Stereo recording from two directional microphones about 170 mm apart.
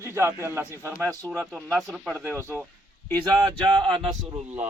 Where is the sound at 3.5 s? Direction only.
25° right (ahead or behind).